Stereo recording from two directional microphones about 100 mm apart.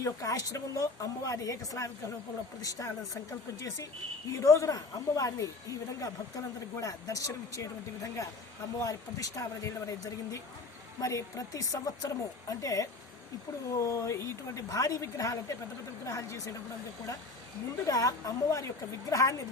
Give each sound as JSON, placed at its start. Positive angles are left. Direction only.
{"t": 0.0, "sound": "speech", "side_deg": 35}
{"t": 11.0, "sound": "speech", "side_deg": 35}
{"t": 17.8, "sound": "speech", "side_deg": 35}